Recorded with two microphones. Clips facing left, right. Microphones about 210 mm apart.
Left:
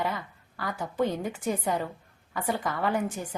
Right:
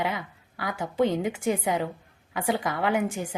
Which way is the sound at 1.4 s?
20° right (ahead or behind).